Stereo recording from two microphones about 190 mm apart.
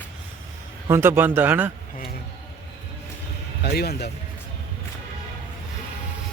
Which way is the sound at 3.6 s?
55° left (ahead or behind).